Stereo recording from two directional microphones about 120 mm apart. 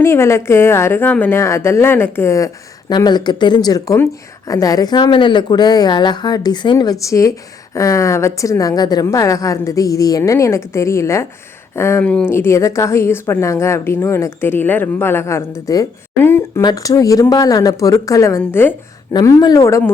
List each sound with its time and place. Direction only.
0.0 s speech: 20° left (ahead or behind)
2.9 s speech: 35° left (ahead or behind); by 12.0 s 20° left (ahead or behind)
12.0 s speech: 10° left (ahead or behind)
12.3 s speech: 20° left (ahead or behind)
16.6 s speech: 30° left (ahead or behind)